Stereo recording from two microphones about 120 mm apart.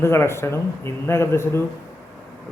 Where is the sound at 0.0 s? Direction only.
20° left (ahead or behind).